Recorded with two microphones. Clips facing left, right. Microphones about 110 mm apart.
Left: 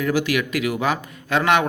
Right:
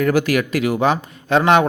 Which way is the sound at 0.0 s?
50° right (ahead or behind).